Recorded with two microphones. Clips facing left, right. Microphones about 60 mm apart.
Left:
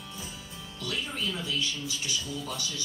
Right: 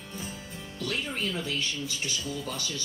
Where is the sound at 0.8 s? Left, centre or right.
Right.